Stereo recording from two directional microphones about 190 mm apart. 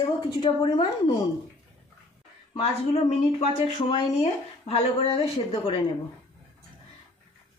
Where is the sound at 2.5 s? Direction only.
35° left (ahead or behind).